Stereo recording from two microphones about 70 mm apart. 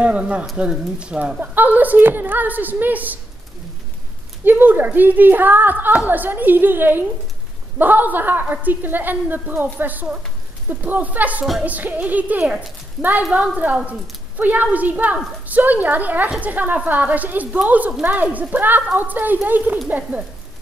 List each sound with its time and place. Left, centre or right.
0.0 s speech: centre
4.5 s speech: right